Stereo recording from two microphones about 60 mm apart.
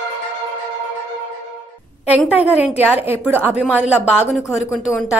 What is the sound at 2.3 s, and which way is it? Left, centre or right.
A woman's voice, right.